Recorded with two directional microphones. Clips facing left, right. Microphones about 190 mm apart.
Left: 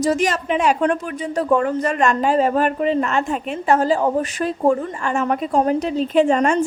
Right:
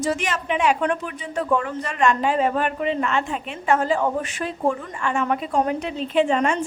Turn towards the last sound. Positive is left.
turn(degrees=40)  # may be behind; listen again after turning